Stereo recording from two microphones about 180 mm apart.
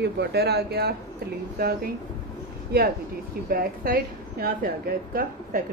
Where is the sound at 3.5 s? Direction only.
55° right (ahead or behind).